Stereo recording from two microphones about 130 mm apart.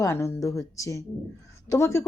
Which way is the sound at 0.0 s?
20° left (ahead or behind).